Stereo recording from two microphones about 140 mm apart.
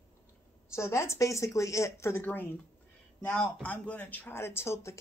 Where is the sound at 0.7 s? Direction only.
20° left (ahead or behind).